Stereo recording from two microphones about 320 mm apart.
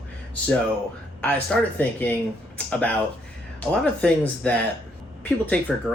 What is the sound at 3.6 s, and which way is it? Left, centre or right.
Speech, centre.